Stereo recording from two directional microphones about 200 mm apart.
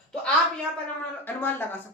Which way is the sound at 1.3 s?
10° left (ahead or behind).